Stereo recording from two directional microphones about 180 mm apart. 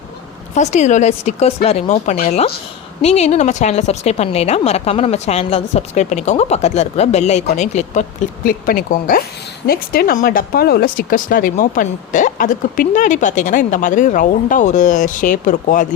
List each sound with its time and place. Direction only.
0.5 s a woman's voice: 40° left (ahead or behind)
8.4 s speech: 50° left (ahead or behind)